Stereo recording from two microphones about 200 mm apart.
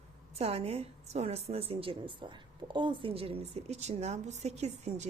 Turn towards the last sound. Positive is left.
turn(degrees=-35)  # may be behind; listen again after turning